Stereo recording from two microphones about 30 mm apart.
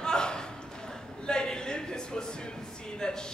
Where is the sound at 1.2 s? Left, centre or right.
Left.